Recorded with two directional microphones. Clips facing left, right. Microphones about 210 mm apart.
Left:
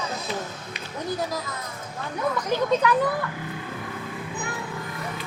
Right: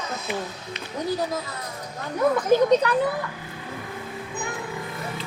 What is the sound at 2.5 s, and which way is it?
Speech, 40° right (ahead or behind).